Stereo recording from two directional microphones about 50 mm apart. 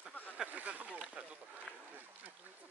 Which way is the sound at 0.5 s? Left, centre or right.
Right.